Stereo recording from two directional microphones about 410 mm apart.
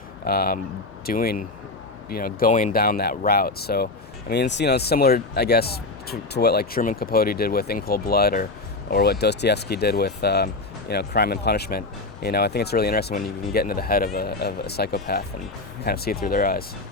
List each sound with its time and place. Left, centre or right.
0.3 s speech: left